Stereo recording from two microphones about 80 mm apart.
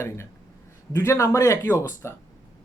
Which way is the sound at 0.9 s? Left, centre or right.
Left.